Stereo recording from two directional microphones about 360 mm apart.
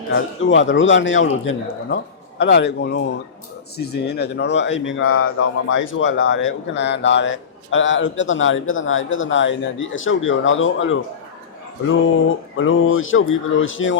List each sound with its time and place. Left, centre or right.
0.1 s speech: left